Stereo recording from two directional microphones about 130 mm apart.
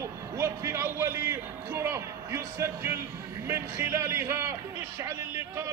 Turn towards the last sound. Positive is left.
turn(degrees=-20)  # may be behind; listen again after turning